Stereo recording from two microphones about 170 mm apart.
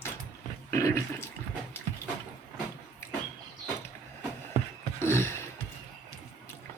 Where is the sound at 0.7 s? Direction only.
15° left (ahead or behind).